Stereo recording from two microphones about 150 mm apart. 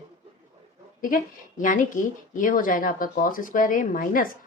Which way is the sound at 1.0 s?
65° left (ahead or behind).